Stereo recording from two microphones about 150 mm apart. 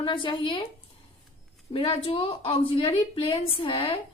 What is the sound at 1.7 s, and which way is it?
A woman's voice, 40° left (ahead or behind).